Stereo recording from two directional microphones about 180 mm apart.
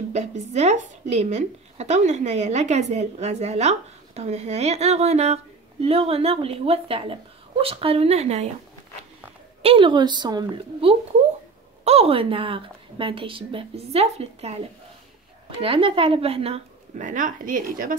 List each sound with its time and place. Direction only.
0.5 s speech: 40° right (ahead or behind)
9.6 s a woman's voice: 30° right (ahead or behind)
15.6 s speech: 30° right (ahead or behind); by 17.9 s 50° right (ahead or behind)